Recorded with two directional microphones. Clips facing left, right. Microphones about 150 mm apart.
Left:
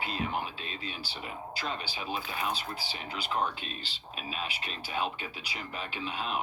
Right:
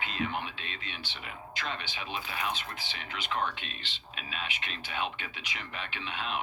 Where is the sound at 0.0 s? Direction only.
35° left (ahead or behind).